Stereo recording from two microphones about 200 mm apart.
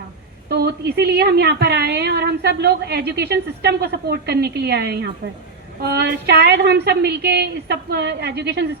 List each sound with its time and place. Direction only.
0.4 s a woman's voice: 55° right (ahead or behind)